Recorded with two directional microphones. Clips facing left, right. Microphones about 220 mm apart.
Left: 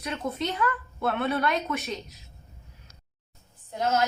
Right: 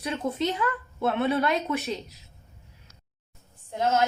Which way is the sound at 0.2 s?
5° right (ahead or behind).